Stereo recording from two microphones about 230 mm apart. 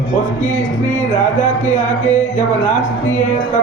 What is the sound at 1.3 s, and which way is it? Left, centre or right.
Speech, left.